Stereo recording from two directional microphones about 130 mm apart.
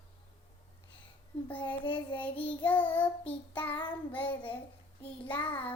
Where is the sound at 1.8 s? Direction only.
40° left (ahead or behind).